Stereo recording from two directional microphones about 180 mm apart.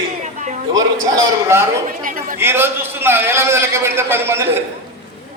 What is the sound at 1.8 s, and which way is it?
Speech, 50° right (ahead or behind).